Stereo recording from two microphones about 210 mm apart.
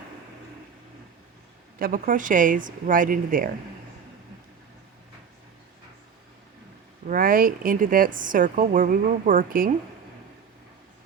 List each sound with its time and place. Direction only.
1.8 s a woman's voice: 40° right (ahead or behind)
7.1 s a woman's voice: 40° right (ahead or behind)